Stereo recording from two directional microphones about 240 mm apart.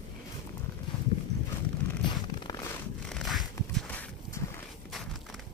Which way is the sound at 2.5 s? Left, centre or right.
Centre.